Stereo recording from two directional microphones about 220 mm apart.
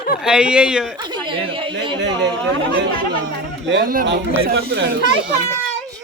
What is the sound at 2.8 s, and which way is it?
Speech, 55° right (ahead or behind).